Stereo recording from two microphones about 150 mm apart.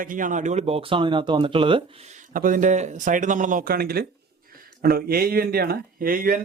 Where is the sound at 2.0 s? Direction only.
60° right (ahead or behind).